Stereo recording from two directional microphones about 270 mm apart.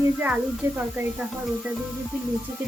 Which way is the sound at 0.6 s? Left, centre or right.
Centre.